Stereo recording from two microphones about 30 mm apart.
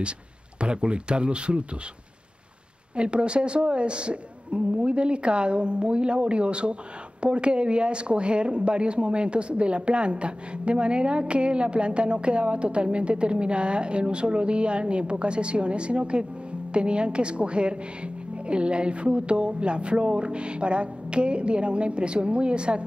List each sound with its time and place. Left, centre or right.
0.6 s a woman's voice: right
3.0 s a woman's voice: right